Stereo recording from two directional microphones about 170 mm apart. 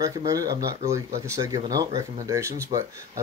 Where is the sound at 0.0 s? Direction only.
20° right (ahead or behind).